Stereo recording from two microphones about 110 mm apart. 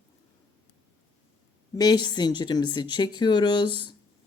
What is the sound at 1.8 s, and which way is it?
Speech, 40° left (ahead or behind).